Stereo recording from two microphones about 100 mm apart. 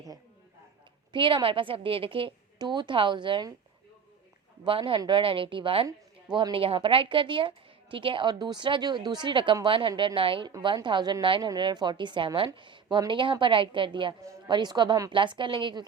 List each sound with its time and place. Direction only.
1.1 s a woman's voice: 55° right (ahead or behind)
2.6 s a woman's voice: 50° right (ahead or behind)
4.6 s a woman's voice: 60° right (ahead or behind)
10.8 s a woman's voice: 50° right (ahead or behind)
12.5 s a sound: 55° right (ahead or behind)
13.1 s a woman's voice: 55° right (ahead or behind)